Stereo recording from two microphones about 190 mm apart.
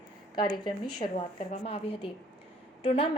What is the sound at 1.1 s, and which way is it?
A woman's voice, 35° left (ahead or behind).